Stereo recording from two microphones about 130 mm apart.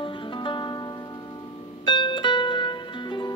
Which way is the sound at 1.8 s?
40° left (ahead or behind).